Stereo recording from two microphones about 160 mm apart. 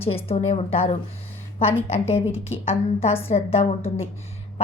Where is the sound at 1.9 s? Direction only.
40° left (ahead or behind).